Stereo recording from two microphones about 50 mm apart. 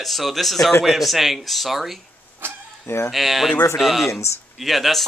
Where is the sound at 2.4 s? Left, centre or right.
Right.